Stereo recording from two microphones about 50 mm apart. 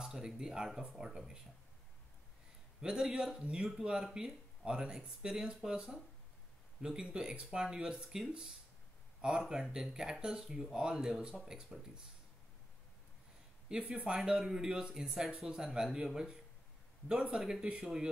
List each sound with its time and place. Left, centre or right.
0.0 s speech: centre
2.8 s speech: centre
13.7 s speech: centre